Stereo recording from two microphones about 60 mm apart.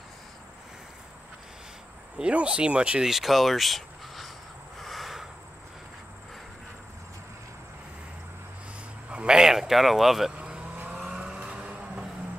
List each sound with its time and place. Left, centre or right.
2.1 s speech: centre
3.1 s speech: centre
4.7 s a sound: centre
9.1 s a sound: centre
10.3 s cattle: centre
11.0 s vehicle: centre